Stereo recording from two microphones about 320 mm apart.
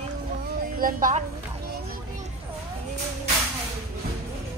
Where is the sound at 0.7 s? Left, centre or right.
Right.